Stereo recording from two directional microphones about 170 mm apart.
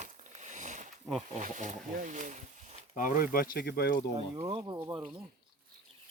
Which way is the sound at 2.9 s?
50° left (ahead or behind).